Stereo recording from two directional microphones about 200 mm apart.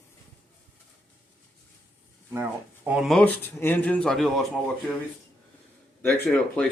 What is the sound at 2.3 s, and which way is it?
Speech, 10° right (ahead or behind).